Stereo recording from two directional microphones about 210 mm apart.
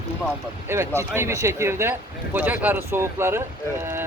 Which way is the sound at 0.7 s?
10° right (ahead or behind).